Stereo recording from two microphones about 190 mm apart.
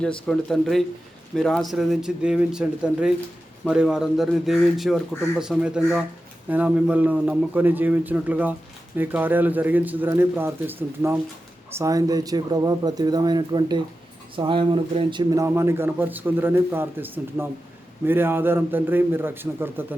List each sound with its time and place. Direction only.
0.0 s speech: 5° left (ahead or behind)